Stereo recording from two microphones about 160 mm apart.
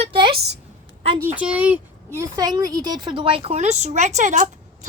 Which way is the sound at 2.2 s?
25° right (ahead or behind).